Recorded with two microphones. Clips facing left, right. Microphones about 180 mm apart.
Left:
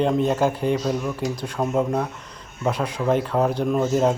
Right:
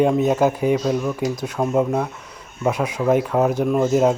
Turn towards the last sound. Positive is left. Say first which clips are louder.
# right 3 dB
turn(degrees=-5)  # may be behind; listen again after turning